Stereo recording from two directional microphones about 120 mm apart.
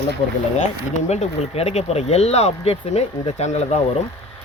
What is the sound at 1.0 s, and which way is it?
Speech, 65° left (ahead or behind).